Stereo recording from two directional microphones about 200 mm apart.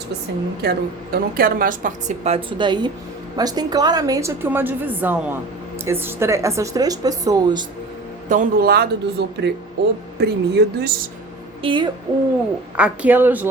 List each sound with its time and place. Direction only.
0.6 s a woman's voice: 50° right (ahead or behind); by 7.6 s 20° right (ahead or behind)
8.3 s speech: 45° right (ahead or behind)
11.6 s a sound: 25° right (ahead or behind)
12.7 s a woman's voice: 5° right (ahead or behind)